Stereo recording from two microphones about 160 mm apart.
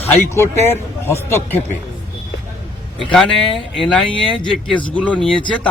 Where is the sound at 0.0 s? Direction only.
15° left (ahead or behind).